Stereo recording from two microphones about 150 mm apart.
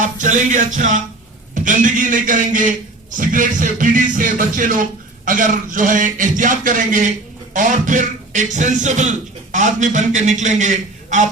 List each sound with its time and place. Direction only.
0.0 s speech: 55° right (ahead or behind)